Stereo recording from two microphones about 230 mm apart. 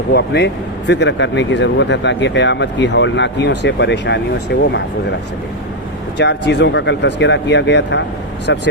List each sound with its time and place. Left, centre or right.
0.1 s speech: left
6.1 s speech: left